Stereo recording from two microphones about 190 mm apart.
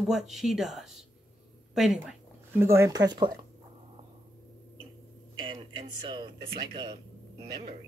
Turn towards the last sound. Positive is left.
turn(degrees=-25)  # may be behind; listen again after turning